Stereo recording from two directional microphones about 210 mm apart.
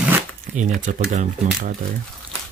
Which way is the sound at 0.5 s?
35° right (ahead or behind).